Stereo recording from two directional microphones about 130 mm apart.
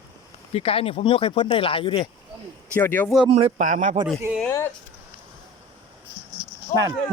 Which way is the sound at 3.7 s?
75° right (ahead or behind).